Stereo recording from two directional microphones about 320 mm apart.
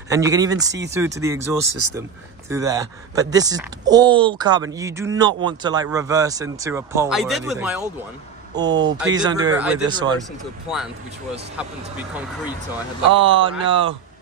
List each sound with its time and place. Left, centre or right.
0.1 s speech: centre
13.1 s speech: centre